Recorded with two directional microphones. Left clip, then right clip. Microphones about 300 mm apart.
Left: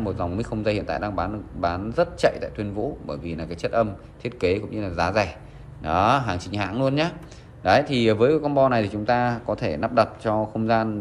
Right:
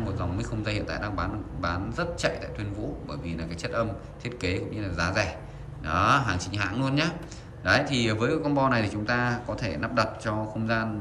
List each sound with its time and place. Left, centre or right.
0.0 s a man's voice: centre